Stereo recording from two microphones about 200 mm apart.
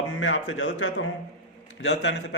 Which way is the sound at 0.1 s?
70° left (ahead or behind).